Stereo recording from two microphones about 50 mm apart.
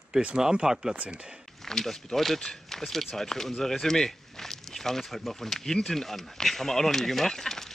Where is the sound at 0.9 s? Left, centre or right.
Right.